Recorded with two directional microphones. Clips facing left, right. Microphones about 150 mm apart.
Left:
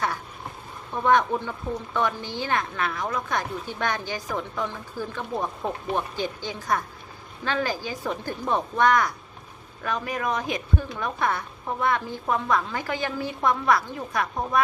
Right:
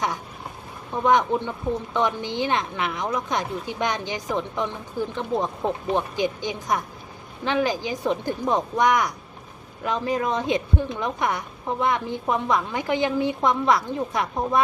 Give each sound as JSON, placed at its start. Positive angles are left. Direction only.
{"t": 1.0, "sound": "a woman's voice", "side_deg": -15}